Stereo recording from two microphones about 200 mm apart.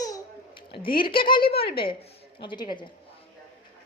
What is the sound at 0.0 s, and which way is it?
Babbling, 20° left (ahead or behind).